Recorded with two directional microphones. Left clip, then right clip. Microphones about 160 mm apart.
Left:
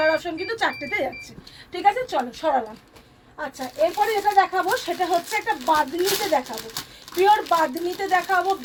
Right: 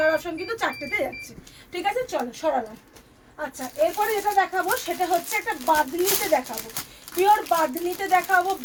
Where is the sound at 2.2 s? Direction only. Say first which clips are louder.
Left 2 dB; 5° left (ahead or behind).